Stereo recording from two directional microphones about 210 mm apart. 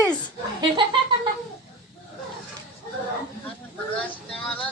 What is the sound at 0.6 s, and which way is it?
Speech, 20° right (ahead or behind).